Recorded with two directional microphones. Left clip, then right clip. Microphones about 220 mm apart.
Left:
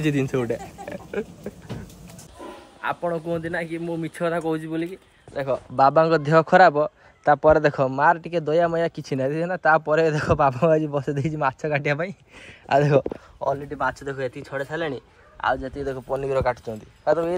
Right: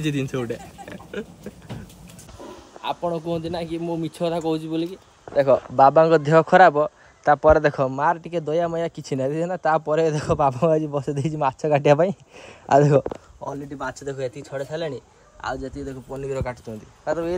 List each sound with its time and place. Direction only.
0.0 s a man's voice: centre (ahead or behind)
0.6 s a sound: 10° right (ahead or behind)
3.3 s speech: 15° right (ahead or behind)
5.3 s speech: 30° right (ahead or behind)
5.8 s a man's voice: centre (ahead or behind)
13.4 s a man's voice: centre (ahead or behind)